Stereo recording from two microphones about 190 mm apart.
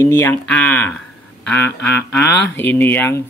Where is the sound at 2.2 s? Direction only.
60° left (ahead or behind).